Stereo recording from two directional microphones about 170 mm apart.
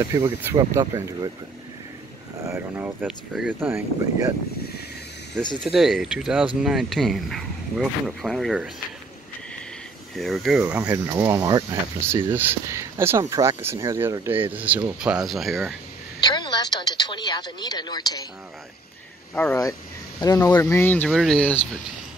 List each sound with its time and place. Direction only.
0.0 s speech: 15° right (ahead or behind)
2.4 s speech: 15° right (ahead or behind)
5.6 s speech: centre (ahead or behind)
10.1 s speech: centre (ahead or behind)
10.6 s speech: 10° right (ahead or behind)
16.2 s a woman's voice: 25° left (ahead or behind)
19.3 s speech: 15° left (ahead or behind)